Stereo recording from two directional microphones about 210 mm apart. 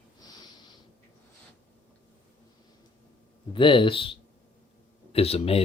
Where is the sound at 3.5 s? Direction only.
25° left (ahead or behind).